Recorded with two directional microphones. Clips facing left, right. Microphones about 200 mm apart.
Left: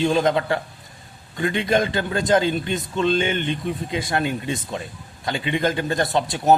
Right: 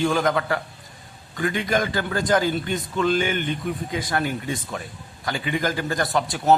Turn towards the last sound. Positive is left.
turn(degrees=25)  # may be behind; listen again after turning